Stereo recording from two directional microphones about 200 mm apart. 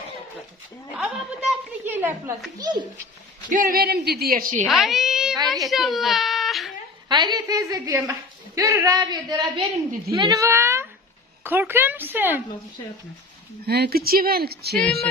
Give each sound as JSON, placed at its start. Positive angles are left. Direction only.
{"t": 0.9, "sound": "a woman's voice", "side_deg": -5}
{"t": 2.6, "sound": "a woman's voice", "side_deg": -20}
{"t": 3.5, "sound": "speech", "side_deg": -45}
{"t": 4.6, "sound": "a woman's voice", "side_deg": 0}
{"t": 7.1, "sound": "a woman's voice", "side_deg": -20}
{"t": 13.7, "sound": "speech", "side_deg": -50}